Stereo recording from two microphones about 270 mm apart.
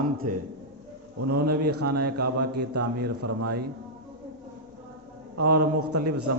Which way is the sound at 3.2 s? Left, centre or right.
Right.